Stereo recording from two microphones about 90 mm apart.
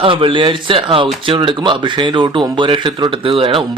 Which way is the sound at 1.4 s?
60° right (ahead or behind).